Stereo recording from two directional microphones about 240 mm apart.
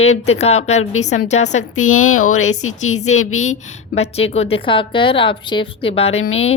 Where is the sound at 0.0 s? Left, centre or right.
Left.